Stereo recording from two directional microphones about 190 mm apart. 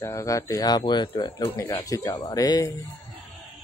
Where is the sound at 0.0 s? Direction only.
15° left (ahead or behind).